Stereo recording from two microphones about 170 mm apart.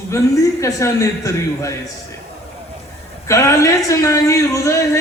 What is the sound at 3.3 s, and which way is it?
A man's voice, 20° left (ahead or behind).